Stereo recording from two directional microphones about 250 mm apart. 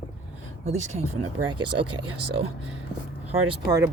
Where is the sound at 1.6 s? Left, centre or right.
Right.